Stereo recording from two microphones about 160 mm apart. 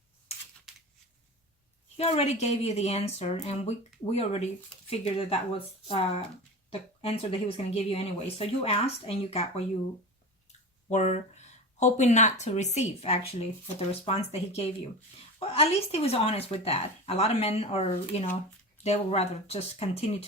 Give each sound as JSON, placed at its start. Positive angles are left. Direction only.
{"t": 2.0, "sound": "speech", "side_deg": 40}
{"t": 10.8, "sound": "speech", "side_deg": 45}